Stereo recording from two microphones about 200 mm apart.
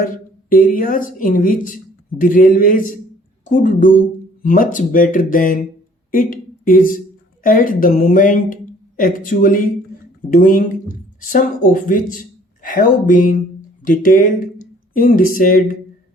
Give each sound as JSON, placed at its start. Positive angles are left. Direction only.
{"t": 0.5, "sound": "a woman's voice", "side_deg": 45}